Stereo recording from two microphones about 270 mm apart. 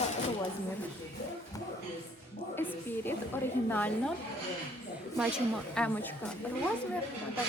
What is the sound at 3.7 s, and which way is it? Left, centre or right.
Speech, centre.